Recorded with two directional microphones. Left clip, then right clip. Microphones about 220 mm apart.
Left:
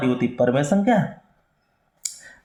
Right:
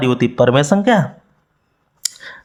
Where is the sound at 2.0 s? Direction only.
40° right (ahead or behind).